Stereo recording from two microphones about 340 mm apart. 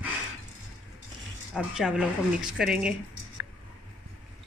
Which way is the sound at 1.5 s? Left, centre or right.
Centre.